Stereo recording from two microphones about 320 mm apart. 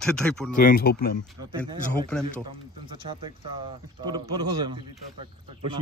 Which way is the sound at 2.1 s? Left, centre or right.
Centre.